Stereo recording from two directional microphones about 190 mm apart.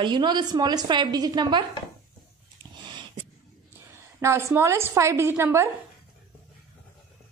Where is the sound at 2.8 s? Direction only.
25° right (ahead or behind).